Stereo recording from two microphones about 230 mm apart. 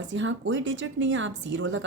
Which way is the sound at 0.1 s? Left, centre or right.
Right.